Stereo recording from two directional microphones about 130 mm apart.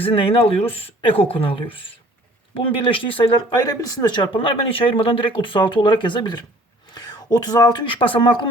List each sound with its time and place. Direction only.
0.0 s speech: 45° left (ahead or behind)